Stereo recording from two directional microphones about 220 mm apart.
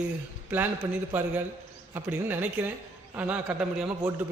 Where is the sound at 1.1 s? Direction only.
10° right (ahead or behind).